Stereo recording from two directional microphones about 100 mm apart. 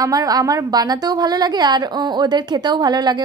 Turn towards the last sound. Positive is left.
turn(degrees=-45)  # may be behind; listen again after turning